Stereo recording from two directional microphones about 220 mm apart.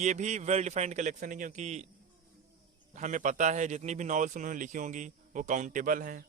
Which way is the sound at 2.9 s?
35° right (ahead or behind).